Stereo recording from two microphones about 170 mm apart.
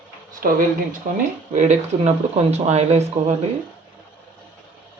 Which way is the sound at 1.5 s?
45° right (ahead or behind).